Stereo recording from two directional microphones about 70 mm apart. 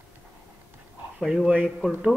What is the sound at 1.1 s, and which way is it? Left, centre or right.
Speech, centre.